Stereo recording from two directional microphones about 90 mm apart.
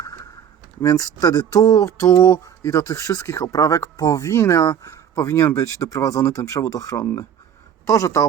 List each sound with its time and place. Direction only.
0.8 s speech: 35° left (ahead or behind)
2.1 s speech: 50° left (ahead or behind)
2.6 s speech: 35° left (ahead or behind)